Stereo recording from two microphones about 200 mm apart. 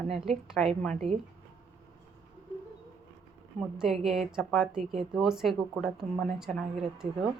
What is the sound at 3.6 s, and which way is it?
Speech, centre (ahead or behind).